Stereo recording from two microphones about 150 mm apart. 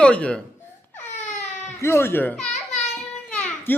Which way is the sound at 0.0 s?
5° left (ahead or behind).